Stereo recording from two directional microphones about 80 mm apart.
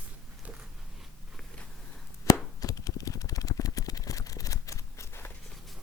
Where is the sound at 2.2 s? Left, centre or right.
Left.